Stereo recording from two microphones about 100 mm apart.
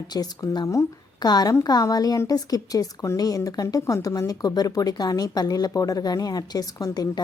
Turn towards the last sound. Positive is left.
turn(degrees=40)  # may be behind; listen again after turning